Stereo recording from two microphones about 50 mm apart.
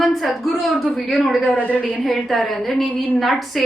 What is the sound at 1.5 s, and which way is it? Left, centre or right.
Speech, left.